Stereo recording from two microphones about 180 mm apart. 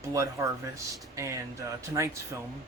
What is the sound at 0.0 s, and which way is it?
A man's voice, 15° right (ahead or behind).